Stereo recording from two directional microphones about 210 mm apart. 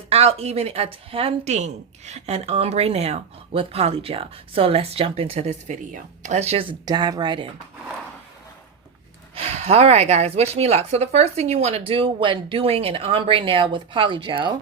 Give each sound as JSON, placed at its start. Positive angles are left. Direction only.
{"t": 0.1, "sound": "a woman's voice", "side_deg": -30}
{"t": 9.3, "sound": "a woman's voice", "side_deg": -30}